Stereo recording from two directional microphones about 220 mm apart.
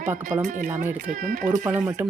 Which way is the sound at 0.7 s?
10° right (ahead or behind).